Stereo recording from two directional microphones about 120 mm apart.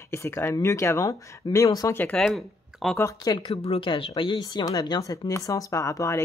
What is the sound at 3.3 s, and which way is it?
Speech, 50° left (ahead or behind).